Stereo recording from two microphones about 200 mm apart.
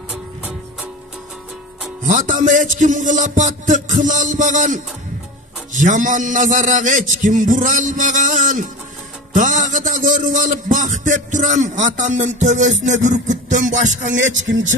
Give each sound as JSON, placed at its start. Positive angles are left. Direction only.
{"t": 0.1, "sound": "music", "side_deg": -5}
{"t": 2.0, "sound": "a man's voice", "side_deg": -40}
{"t": 14.2, "sound": "speech", "side_deg": -70}